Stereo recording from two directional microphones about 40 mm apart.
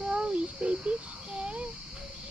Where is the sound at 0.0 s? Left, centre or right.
Right.